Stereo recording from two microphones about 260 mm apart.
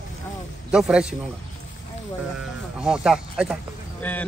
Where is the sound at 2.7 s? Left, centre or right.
Centre.